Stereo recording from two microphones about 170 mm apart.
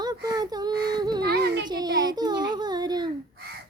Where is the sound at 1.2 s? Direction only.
70° right (ahead or behind).